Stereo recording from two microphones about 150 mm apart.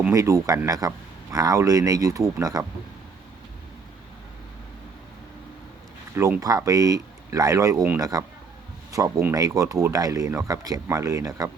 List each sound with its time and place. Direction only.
0.1 s speech: 20° right (ahead or behind)
6.1 s speech: 20° right (ahead or behind)